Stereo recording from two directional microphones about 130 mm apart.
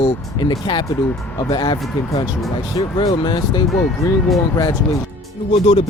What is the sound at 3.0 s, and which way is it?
Speech, 35° left (ahead or behind).